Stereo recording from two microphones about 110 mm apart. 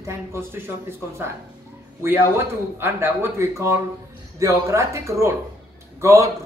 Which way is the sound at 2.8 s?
20° right (ahead or behind).